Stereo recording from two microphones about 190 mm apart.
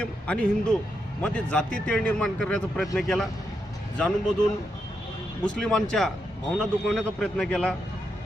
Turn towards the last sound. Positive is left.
turn(degrees=5)  # may be behind; listen again after turning